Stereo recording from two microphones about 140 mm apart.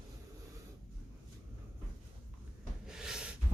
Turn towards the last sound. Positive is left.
turn(degrees=-5)  # may be behind; listen again after turning